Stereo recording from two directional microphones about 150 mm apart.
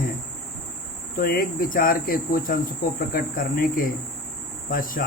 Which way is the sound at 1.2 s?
80° left.